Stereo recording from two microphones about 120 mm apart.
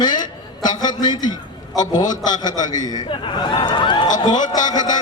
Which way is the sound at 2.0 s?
90° left.